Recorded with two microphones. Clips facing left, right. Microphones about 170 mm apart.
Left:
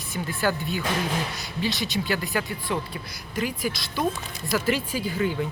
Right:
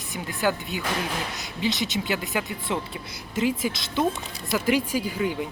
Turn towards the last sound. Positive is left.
turn(degrees=-10)  # may be behind; listen again after turning